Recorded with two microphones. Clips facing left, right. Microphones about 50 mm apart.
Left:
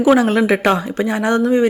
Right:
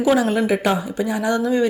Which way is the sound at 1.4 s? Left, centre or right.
Left.